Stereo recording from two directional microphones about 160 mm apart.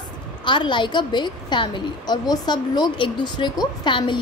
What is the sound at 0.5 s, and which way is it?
A woman's voice, 30° left (ahead or behind).